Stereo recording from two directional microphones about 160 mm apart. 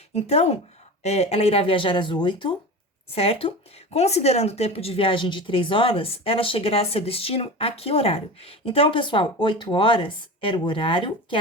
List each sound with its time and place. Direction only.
0.1 s speech: 40° left (ahead or behind)